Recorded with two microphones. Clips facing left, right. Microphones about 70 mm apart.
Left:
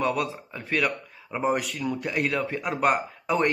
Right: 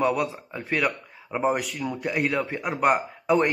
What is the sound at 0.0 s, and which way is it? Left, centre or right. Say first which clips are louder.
Speech: right 2 dB; centre.